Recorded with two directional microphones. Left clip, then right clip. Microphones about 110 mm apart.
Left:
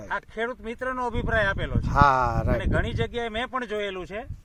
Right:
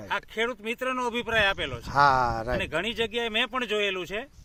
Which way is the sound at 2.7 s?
15° right (ahead or behind).